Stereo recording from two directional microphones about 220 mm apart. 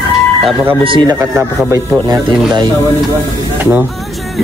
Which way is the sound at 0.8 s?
20° right (ahead or behind).